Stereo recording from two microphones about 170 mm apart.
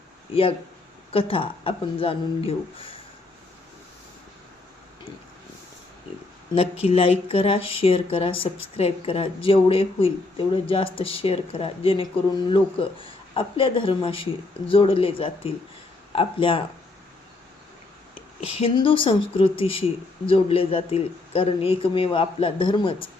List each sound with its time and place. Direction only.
1.1 s a woman's voice: 35° left (ahead or behind)
6.8 s a woman's voice: 35° left (ahead or behind)
18.3 s a woman's voice: 35° left (ahead or behind)